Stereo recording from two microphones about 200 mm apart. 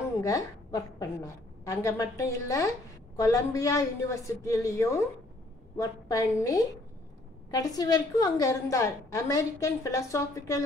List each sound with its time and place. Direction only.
0.0 s a woman's voice: 15° left (ahead or behind)